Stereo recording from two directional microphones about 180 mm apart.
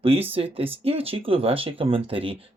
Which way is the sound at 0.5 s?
30° right (ahead or behind).